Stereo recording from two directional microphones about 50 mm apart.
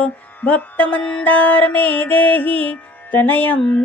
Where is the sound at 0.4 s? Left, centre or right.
Left.